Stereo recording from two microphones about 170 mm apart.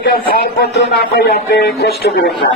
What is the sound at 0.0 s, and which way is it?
Speech, 60° left (ahead or behind).